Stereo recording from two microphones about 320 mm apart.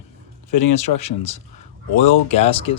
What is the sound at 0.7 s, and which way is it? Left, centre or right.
Speech, centre.